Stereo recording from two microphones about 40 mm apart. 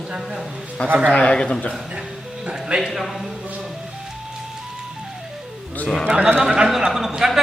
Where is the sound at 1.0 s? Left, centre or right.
Left.